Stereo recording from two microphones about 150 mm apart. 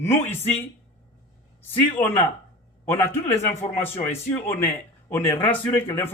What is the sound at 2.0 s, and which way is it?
Speech, 15° left (ahead or behind).